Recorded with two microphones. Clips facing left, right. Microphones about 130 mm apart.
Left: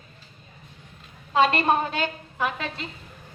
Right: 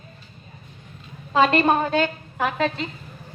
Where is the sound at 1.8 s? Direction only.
45° right (ahead or behind).